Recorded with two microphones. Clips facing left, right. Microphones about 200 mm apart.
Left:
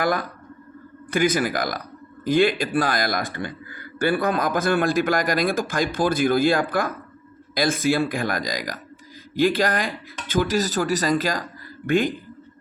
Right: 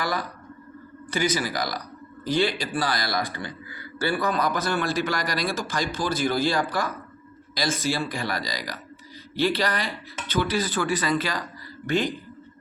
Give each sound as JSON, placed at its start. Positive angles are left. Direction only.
{"t": 0.0, "sound": "a man's voice", "side_deg": 50}